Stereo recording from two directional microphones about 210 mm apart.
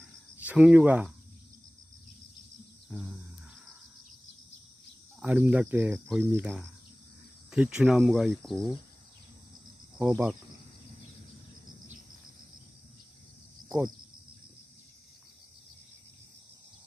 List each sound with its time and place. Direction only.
0.5 s speech: 5° right (ahead or behind)
2.9 s speech: 5° right (ahead or behind)
5.2 s speech: 5° right (ahead or behind)
9.9 s speech: 5° right (ahead or behind)
13.7 s speech: 20° right (ahead or behind)